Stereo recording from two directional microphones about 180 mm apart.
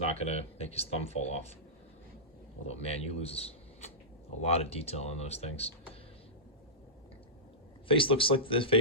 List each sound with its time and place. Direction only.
0.0 s speech: 35° left (ahead or behind)
2.6 s speech: 35° left (ahead or behind)
7.9 s speech: 30° left (ahead or behind)